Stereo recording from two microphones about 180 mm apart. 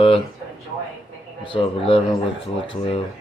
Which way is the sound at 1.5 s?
30° left (ahead or behind).